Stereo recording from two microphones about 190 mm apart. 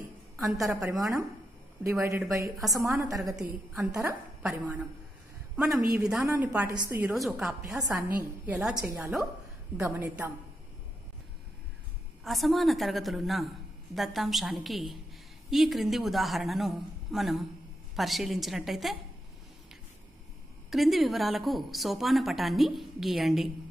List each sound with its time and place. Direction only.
0.4 s a woman's voice: centre (ahead or behind)
0.8 s speech: 20° right (ahead or behind)
3.3 s a woman's voice: 5° right (ahead or behind)
3.9 s a woman's voice: 15° right (ahead or behind)
5.9 s a woman's voice: 5° right (ahead or behind)
12.3 s a woman's voice: centre (ahead or behind)
20.7 s a woman's voice: centre (ahead or behind)